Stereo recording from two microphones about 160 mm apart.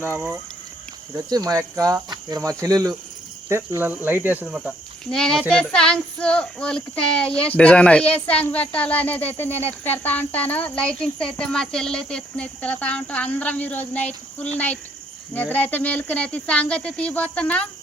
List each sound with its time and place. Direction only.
0.0 s cricket: 15° right (ahead or behind)
1.1 s speech: 25° right (ahead or behind)
3.5 s cricket: 15° right (ahead or behind)
5.1 s speech: 5° left (ahead or behind)